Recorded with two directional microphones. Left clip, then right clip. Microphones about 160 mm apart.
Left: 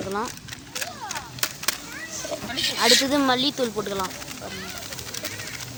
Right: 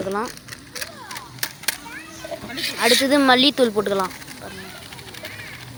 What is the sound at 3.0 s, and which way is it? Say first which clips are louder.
Speech: right 6 dB; 15° right (ahead or behind).